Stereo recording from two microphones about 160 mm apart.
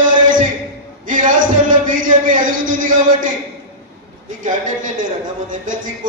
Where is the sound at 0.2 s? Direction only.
55° right (ahead or behind).